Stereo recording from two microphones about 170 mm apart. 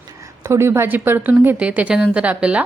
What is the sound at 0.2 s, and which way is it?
A woman's voice, 15° right (ahead or behind).